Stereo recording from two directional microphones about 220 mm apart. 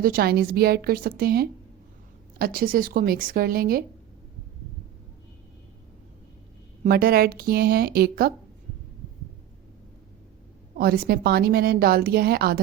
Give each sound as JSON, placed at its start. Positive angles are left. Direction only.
{"t": 0.0, "sound": "a woman's voice", "side_deg": -45}
{"t": 6.8, "sound": "a woman's voice", "side_deg": -40}
{"t": 10.8, "sound": "a woman's voice", "side_deg": -45}